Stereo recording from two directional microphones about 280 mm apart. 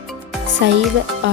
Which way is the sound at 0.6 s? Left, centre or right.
Right.